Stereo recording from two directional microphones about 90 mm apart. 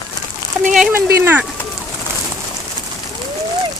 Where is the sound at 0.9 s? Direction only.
25° right (ahead or behind).